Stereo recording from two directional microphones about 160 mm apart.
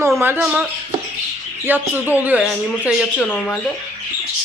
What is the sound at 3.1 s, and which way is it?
Speech, 10° left (ahead or behind).